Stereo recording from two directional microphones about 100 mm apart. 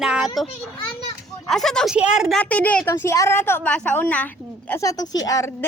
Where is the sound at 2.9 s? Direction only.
25° left (ahead or behind).